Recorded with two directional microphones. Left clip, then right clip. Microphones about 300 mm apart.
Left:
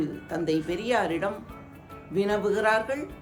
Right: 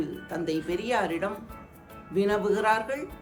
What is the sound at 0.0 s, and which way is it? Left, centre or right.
A woman's voice, centre.